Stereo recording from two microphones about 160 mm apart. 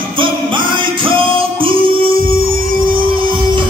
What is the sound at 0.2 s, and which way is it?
Music, 30° right (ahead or behind).